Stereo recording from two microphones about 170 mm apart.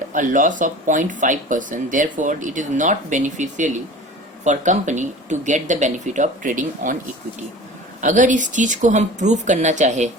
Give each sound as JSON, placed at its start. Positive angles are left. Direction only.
{"t": 0.1, "sound": "speech", "side_deg": -50}
{"t": 8.0, "sound": "speech", "side_deg": -50}